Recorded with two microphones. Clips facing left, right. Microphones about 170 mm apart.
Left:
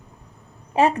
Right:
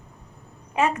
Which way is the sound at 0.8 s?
35° left (ahead or behind).